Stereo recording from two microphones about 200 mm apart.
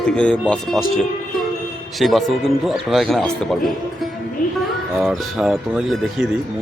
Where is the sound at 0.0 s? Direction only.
5° left (ahead or behind).